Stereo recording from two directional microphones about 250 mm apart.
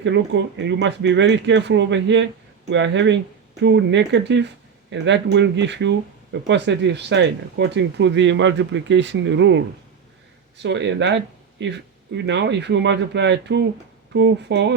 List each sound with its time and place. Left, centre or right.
0.0 s speech: right